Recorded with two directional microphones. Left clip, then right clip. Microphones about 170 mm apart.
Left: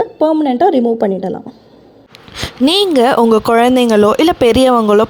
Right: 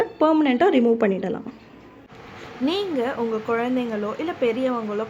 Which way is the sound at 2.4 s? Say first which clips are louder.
Left 13 dB; 65° left (ahead or behind).